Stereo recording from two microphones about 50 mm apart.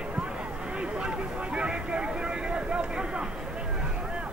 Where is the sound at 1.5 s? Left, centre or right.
Centre.